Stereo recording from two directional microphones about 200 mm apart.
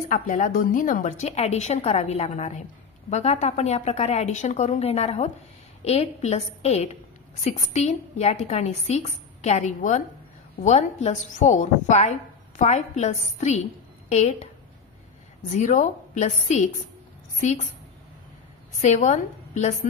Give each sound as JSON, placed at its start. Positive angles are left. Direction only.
{"t": 0.1, "sound": "a woman's voice", "side_deg": 40}
{"t": 15.5, "sound": "a woman's voice", "side_deg": 35}
{"t": 18.8, "sound": "a woman's voice", "side_deg": 35}